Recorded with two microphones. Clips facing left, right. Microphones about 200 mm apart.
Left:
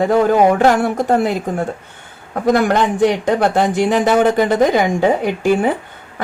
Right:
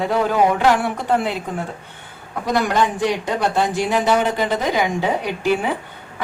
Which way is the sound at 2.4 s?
50° left (ahead or behind).